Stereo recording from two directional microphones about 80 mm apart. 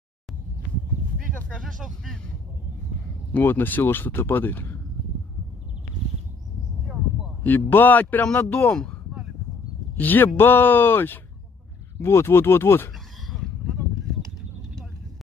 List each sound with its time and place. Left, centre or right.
1.3 s a sound: centre
3.3 s speech: left
7.4 s speech: left
9.9 s speech: left